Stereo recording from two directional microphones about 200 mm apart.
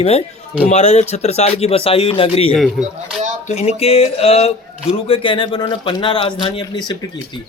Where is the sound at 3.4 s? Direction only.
30° left (ahead or behind).